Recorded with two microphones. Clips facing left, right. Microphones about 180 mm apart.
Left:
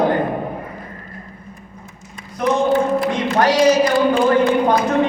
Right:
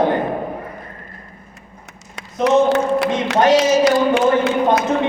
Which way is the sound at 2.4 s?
75° right (ahead or behind).